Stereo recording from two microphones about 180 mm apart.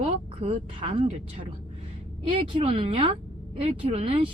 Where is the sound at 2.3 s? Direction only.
30° right (ahead or behind).